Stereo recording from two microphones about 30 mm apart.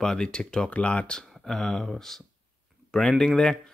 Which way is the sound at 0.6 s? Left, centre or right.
Left.